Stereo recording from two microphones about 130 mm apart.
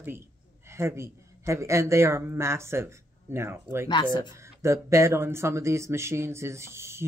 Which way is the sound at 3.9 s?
35° left (ahead or behind).